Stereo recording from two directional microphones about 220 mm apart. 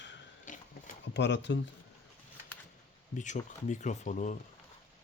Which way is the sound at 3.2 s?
35° left (ahead or behind).